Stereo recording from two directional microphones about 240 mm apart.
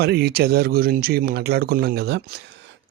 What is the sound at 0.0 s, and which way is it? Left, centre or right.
Speech, right.